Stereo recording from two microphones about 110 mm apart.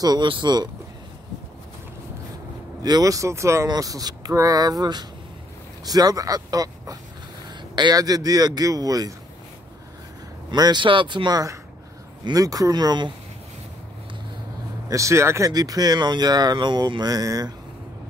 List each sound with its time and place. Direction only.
0.0 s speech: 40° right (ahead or behind)
2.8 s speech: 35° right (ahead or behind)
10.5 s speech: 40° right (ahead or behind)
14.9 s speech: 30° right (ahead or behind)